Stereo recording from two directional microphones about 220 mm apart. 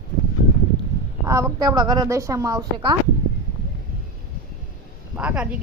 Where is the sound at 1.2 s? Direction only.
15° right (ahead or behind).